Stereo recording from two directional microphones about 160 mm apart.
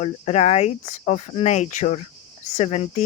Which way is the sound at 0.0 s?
40° left (ahead or behind).